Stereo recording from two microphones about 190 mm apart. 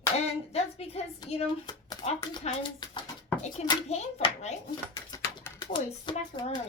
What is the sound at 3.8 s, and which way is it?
Speech, 30° left (ahead or behind).